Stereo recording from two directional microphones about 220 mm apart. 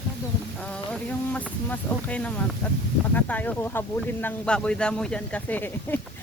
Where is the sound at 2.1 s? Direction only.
5° left (ahead or behind).